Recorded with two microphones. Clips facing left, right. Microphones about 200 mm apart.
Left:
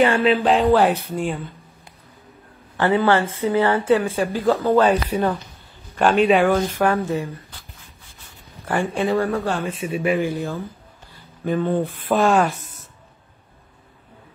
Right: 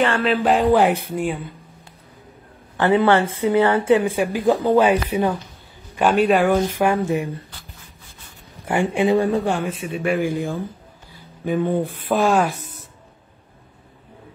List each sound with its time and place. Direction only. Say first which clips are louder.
0.2 s speech: left 1 dB; centre (ahead or behind)
0.7 s speech: even; 15° right (ahead or behind)
2.8 s speech: right 2 dB; 20° right (ahead or behind)
8.6 s speech: right 3 dB; 15° right (ahead or behind)
9.7 s speech: left 1 dB; 5° left (ahead or behind)
10.2 s speech: right 2 dB; 15° right (ahead or behind)
12.1 s speech: left 1 dB; centre (ahead or behind)